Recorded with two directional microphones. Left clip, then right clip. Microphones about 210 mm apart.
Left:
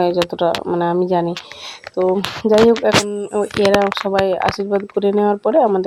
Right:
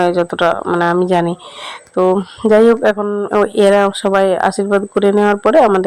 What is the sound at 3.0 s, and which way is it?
A woman's voice, 5° right (ahead or behind).